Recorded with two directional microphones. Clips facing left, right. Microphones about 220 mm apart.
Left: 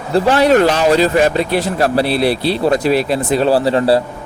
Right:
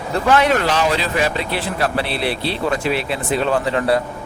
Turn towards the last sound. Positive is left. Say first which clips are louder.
# left 5 dB
turn(degrees=30)  # may be behind; listen again after turning